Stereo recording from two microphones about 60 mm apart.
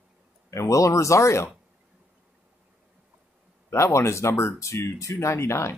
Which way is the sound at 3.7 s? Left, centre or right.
Left.